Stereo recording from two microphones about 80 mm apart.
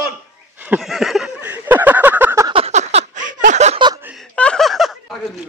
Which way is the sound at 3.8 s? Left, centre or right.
Right.